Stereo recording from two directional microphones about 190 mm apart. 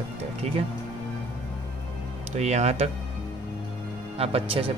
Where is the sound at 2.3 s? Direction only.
35° right (ahead or behind).